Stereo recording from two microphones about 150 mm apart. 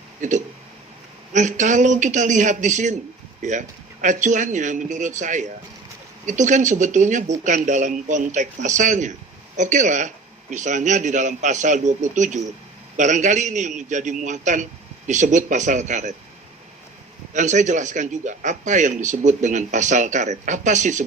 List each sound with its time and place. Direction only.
0.2 s a man's voice: 55° right (ahead or behind)
17.3 s a man's voice: 55° right (ahead or behind)